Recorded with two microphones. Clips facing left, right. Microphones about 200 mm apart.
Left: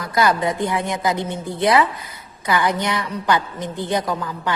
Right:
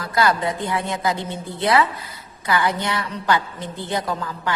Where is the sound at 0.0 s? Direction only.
15° left (ahead or behind).